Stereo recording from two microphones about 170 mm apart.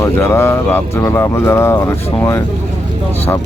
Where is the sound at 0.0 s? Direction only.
15° left (ahead or behind).